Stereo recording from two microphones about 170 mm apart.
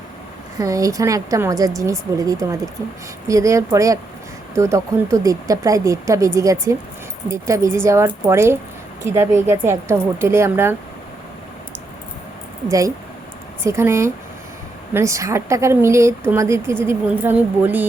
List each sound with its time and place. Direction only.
0.6 s speech: 20° right (ahead or behind)
12.6 s speech: 20° right (ahead or behind)